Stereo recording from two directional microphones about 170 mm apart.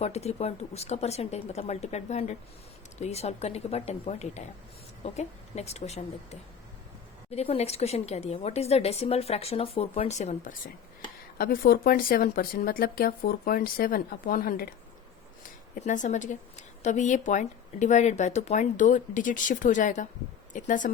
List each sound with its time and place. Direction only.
0.0 s a woman's voice: 40° left (ahead or behind)
7.3 s a woman's voice: 35° left (ahead or behind)
11.3 s speech: 60° left (ahead or behind)
15.8 s a woman's voice: 45° left (ahead or behind)